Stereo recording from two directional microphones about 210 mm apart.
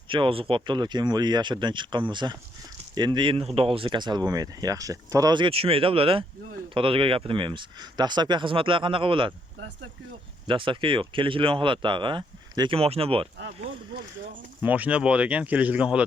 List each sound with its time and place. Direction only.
0.1 s speech: 25° right (ahead or behind)
10.4 s speech: 25° right (ahead or behind)
14.6 s speech: 10° right (ahead or behind)